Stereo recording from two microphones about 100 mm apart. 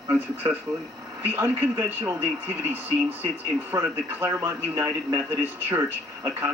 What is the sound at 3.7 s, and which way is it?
Speech, 35° right (ahead or behind).